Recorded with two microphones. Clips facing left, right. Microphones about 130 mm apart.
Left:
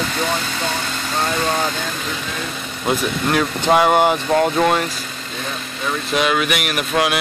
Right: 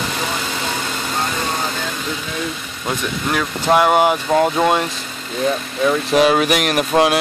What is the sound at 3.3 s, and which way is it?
Speech, centre (ahead or behind).